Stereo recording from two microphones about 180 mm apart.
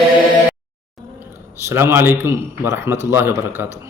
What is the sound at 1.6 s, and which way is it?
A man's voice, 15° right (ahead or behind).